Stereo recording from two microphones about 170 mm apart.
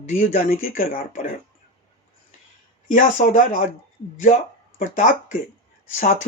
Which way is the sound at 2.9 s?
50° left (ahead or behind).